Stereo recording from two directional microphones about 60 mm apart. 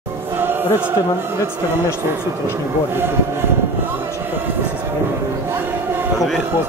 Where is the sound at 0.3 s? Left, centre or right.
Right.